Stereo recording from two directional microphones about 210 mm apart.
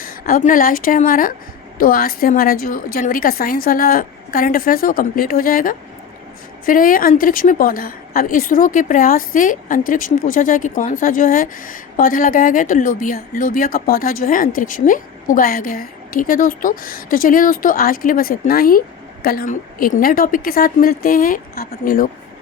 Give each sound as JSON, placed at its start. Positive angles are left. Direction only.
{"t": 0.0, "sound": "a woman's voice", "side_deg": 40}